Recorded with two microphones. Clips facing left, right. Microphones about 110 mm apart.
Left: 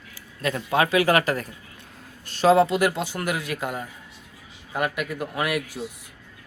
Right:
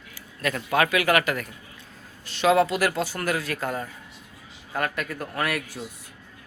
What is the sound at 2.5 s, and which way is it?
Speech, 25° left (ahead or behind).